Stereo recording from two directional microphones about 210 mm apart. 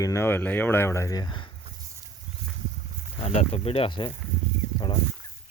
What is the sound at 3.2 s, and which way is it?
Speech, 30° left (ahead or behind).